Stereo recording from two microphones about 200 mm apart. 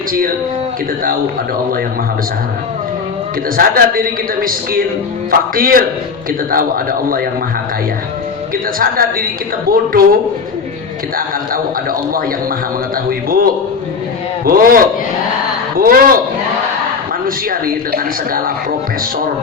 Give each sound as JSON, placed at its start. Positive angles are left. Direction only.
{"t": 3.6, "sound": "a man's voice", "side_deg": -45}
{"t": 8.8, "sound": "a man's voice", "side_deg": -45}
{"t": 11.5, "sound": "a man's voice", "side_deg": -45}
{"t": 15.8, "sound": "a man's voice", "side_deg": -45}
{"t": 17.2, "sound": "a man's voice", "side_deg": -45}